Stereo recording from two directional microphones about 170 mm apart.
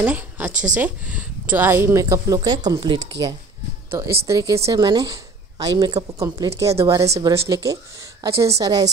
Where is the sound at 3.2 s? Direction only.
90° right.